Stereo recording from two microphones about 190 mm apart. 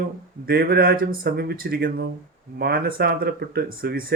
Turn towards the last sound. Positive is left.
turn(degrees=-55)  # may be behind; listen again after turning